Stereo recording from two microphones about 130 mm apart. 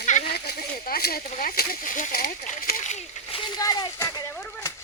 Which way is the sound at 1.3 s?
90° left.